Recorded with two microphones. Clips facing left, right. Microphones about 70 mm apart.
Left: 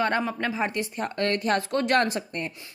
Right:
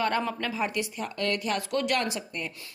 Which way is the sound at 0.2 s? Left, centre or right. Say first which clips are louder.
Left 2 dB; centre.